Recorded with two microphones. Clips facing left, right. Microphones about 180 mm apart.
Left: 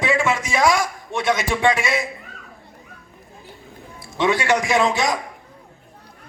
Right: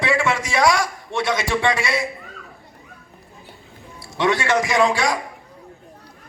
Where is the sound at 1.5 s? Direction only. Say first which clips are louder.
Even; 15° left (ahead or behind).